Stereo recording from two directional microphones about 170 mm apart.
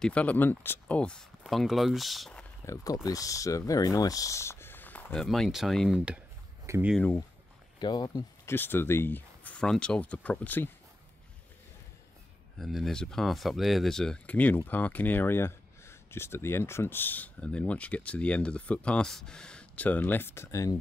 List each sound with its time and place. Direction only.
0.0 s speech: 5° left (ahead or behind)
2.6 s speech: 20° left (ahead or behind); by 6.9 s 10° right (ahead or behind)
7.0 s speech: 10° left (ahead or behind)
7.8 s speech: 25° left (ahead or behind)
8.5 s speech: 10° left (ahead or behind)
12.5 s speech: centre (ahead or behind); by 20.8 s 20° left (ahead or behind)